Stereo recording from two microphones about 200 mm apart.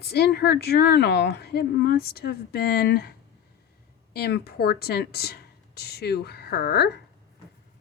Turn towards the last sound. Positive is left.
turn(degrees=55)  # may be behind; listen again after turning